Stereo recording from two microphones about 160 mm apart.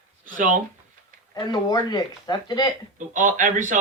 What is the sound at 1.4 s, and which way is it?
Speech, 25° left (ahead or behind).